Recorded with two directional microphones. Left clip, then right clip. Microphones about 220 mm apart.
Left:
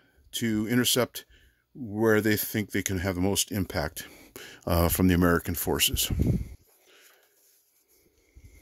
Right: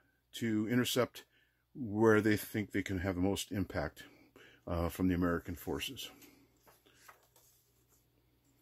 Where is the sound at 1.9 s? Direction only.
15° left (ahead or behind); by 6.1 s 45° left (ahead or behind).